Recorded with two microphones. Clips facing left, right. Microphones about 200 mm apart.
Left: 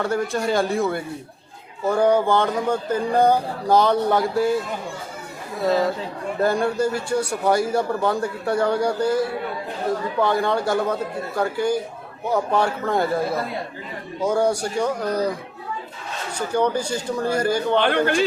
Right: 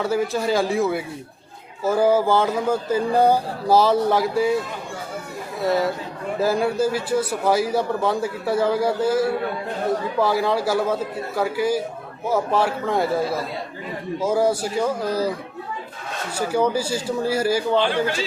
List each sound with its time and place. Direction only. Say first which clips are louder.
0.0 s speech: right 1 dB; 5° right (ahead or behind)
6.4 s speech: even; 5° right (ahead or behind)
16.5 s speech: even; 5° right (ahead or behind)
17.7 s speech: left 2 dB; 60° left (ahead or behind)